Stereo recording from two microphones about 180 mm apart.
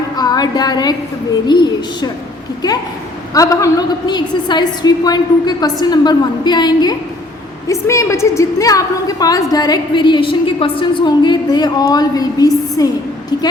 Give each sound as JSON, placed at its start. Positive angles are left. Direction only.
{"t": 0.2, "sound": "a woman's voice", "side_deg": 20}
{"t": 3.3, "sound": "a woman's voice", "side_deg": 20}